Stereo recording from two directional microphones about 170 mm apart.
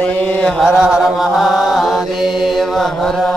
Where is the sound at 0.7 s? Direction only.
5° right (ahead or behind).